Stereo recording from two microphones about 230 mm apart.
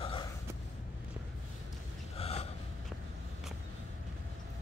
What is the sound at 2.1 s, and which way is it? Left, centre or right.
Gasp, left.